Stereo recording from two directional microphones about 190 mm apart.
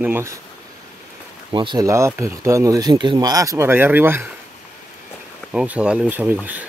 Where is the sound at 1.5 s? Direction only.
25° right (ahead or behind).